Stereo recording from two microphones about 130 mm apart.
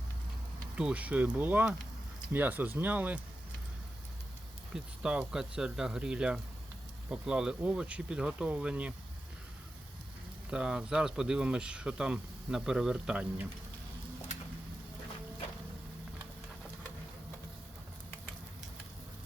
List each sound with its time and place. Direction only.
0.8 s speech: 10° right (ahead or behind)
4.7 s speech: 5° right (ahead or behind)
10.5 s speech: 5° right (ahead or behind)